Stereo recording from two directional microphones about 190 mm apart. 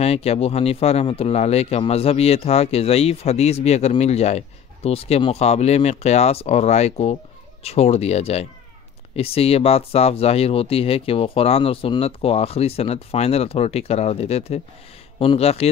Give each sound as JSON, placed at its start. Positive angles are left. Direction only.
{"t": 0.0, "sound": "speech", "side_deg": 35}